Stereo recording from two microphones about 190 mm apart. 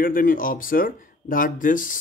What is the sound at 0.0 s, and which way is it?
Speech, 45° left (ahead or behind).